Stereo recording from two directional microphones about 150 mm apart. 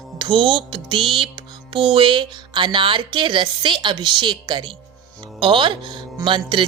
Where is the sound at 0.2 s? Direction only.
35° right (ahead or behind).